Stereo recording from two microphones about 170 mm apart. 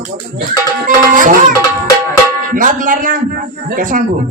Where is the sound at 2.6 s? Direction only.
50° right (ahead or behind).